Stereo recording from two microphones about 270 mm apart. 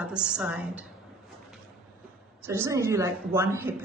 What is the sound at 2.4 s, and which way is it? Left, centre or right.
A woman's voice, centre.